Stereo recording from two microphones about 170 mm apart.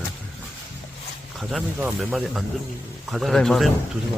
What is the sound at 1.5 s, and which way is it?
Speech, 5° right (ahead or behind).